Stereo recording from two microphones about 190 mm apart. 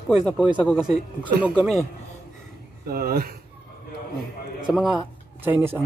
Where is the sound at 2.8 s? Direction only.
50° right (ahead or behind).